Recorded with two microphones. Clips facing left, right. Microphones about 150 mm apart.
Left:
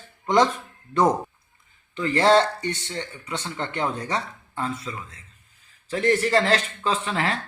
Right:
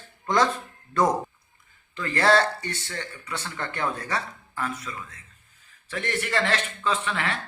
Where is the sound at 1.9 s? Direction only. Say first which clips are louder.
Left 3 dB; 20° left (ahead or behind).